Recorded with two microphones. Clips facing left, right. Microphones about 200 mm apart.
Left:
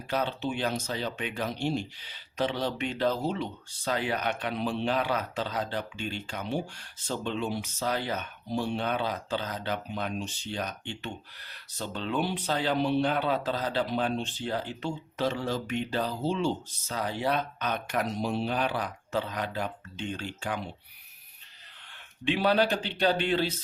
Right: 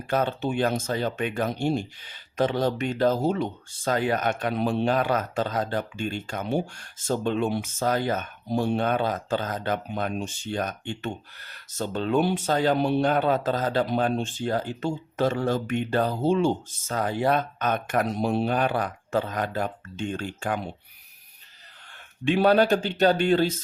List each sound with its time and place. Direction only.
0.1 s speech: 50° right (ahead or behind)
22.2 s speech: 45° right (ahead or behind)